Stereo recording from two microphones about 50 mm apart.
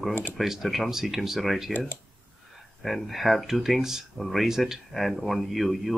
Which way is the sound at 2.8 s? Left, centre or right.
Centre.